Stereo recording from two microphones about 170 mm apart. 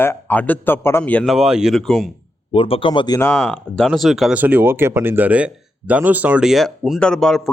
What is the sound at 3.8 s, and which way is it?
Speech, centre (ahead or behind).